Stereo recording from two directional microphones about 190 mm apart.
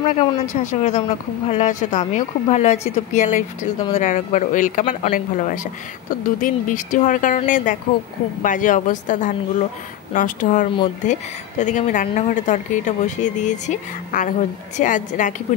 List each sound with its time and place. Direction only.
0.0 s speech: 40° left (ahead or behind)